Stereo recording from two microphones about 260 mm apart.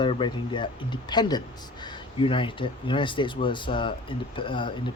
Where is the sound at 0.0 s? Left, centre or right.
Centre.